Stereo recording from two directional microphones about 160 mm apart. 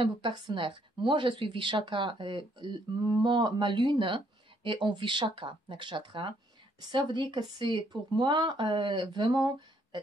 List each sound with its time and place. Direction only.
0.0 s speech: 30° right (ahead or behind)